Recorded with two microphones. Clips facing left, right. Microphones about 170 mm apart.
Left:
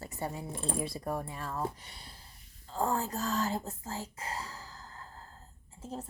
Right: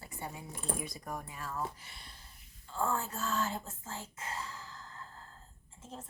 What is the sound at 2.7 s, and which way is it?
Speech, 35° left (ahead or behind).